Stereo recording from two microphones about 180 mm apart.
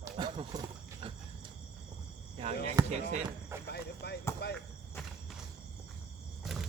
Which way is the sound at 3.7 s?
65° left (ahead or behind).